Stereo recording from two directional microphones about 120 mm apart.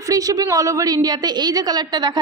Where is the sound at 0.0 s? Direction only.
30° right (ahead or behind).